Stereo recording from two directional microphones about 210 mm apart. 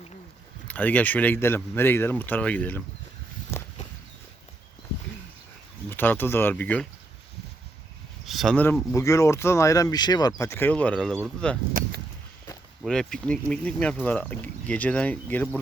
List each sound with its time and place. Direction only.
0.7 s speech: 10° left (ahead or behind)
3.5 s walk: 10° left (ahead or behind)
5.9 s speech: 10° left (ahead or behind)
8.2 s speech: centre (ahead or behind)
12.8 s speech: 5° left (ahead or behind)